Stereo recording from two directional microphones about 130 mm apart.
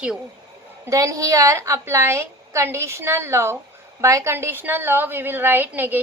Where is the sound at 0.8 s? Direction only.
25° right (ahead or behind).